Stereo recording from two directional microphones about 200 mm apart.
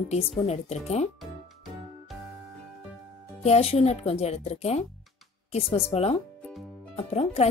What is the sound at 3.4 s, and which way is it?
Speech, 30° left (ahead or behind).